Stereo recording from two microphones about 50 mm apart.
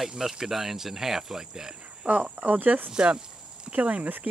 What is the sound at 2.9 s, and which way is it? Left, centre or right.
Speech, centre.